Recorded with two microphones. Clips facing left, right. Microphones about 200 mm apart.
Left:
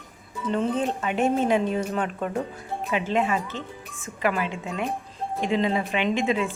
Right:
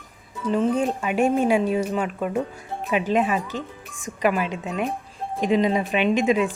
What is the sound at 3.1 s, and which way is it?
Speech, 15° right (ahead or behind).